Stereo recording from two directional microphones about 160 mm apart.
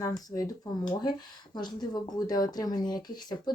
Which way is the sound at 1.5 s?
25° left (ahead or behind).